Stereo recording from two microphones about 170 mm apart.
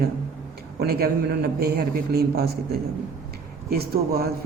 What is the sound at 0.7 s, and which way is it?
A man's voice, 65° right (ahead or behind).